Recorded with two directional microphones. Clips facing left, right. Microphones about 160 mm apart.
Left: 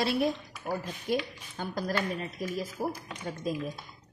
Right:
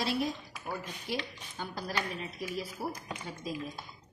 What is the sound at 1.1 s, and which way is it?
Speech, 50° left (ahead or behind).